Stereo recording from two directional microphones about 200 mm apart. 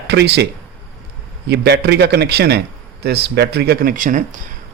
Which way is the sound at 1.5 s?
55° right (ahead or behind).